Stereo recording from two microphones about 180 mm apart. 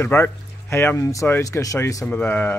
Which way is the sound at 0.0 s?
15° left (ahead or behind).